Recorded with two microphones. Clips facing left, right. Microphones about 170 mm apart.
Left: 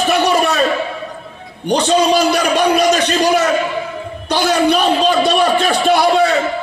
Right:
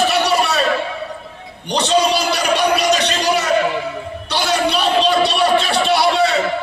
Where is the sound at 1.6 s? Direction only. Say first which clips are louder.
Left 3 dB; 50° left (ahead or behind).